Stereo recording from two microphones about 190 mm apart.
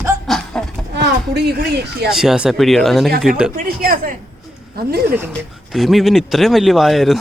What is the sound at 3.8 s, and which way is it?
A woman's voice, 50° right (ahead or behind).